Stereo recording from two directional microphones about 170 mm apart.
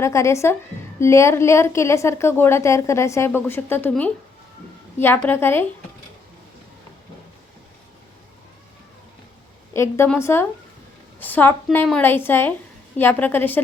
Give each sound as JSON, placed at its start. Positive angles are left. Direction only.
{"t": 0.0, "sound": "a woman's voice", "side_deg": 15}
{"t": 9.7, "sound": "a woman's voice", "side_deg": 15}